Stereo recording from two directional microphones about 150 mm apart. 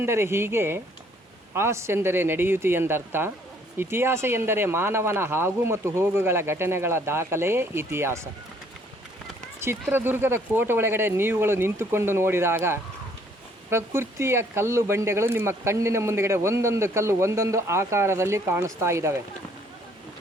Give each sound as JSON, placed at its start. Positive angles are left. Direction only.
{"t": 0.0, "sound": "speech", "side_deg": -15}
{"t": 9.6, "sound": "speech", "side_deg": -15}